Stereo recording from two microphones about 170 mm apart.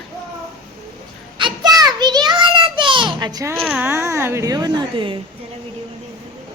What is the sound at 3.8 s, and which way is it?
Speech, 15° right (ahead or behind).